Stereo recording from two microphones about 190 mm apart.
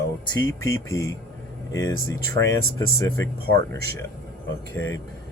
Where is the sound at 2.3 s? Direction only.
15° left (ahead or behind).